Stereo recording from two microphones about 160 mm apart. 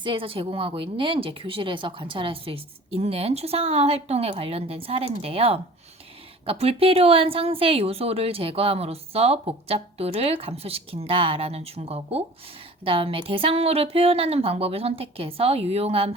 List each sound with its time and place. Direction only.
0.0 s a woman's voice: 35° right (ahead or behind)